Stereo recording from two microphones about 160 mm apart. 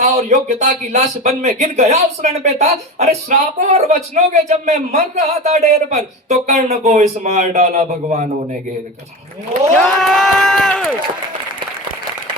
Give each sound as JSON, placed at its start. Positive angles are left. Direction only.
{"t": 0.0, "sound": "speech", "side_deg": -45}
{"t": 9.7, "sound": "speech", "side_deg": 0}